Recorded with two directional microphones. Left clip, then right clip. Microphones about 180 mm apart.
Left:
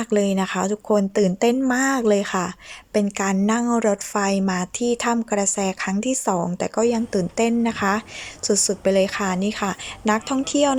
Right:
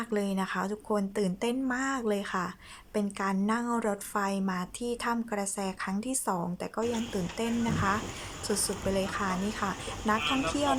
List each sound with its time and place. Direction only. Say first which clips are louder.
0.0 s a woman's voice: left 11 dB; 15° left (ahead or behind)